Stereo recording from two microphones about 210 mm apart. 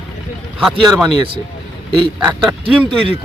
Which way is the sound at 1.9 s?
20° right (ahead or behind).